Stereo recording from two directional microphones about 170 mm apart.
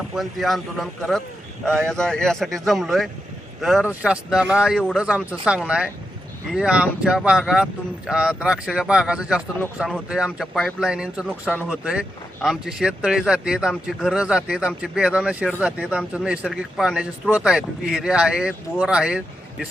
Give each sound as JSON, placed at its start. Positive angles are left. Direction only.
{"t": 0.1, "sound": "speech", "side_deg": 0}